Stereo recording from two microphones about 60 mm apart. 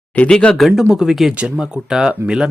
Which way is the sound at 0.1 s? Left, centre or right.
Centre.